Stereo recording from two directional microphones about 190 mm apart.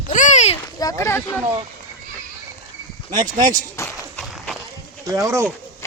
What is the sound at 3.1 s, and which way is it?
Speech, 45° right (ahead or behind).